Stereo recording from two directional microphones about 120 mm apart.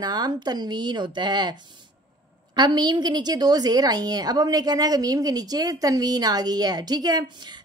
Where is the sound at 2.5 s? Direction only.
35° right (ahead or behind).